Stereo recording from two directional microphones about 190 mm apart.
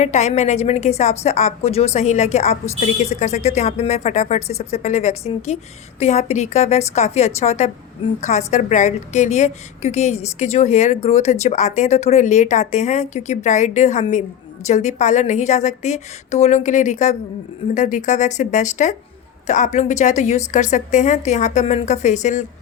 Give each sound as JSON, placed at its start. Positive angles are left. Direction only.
{"t": 0.0, "sound": "a woman's voice", "side_deg": 40}